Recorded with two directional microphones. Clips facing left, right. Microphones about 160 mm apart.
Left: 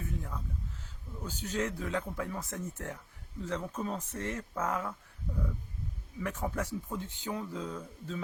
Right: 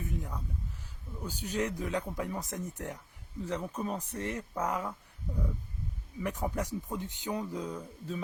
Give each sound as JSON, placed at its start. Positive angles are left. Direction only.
{"t": 0.0, "sound": "a sound", "side_deg": -20}
{"t": 1.2, "sound": "speech", "side_deg": -10}
{"t": 6.2, "sound": "speech", "side_deg": -15}